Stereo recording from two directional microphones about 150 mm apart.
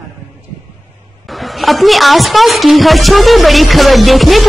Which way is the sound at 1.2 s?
Centre (ahead or behind).